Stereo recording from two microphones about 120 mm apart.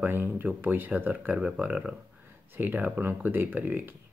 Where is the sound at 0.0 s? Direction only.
15° right (ahead or behind).